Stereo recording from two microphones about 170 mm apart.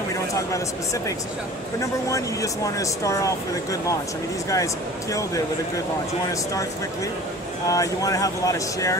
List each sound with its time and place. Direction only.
1.8 s speech: 20° left (ahead or behind)
7.6 s speech: 20° left (ahead or behind)